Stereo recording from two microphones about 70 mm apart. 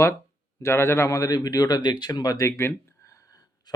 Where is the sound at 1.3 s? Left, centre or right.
Left.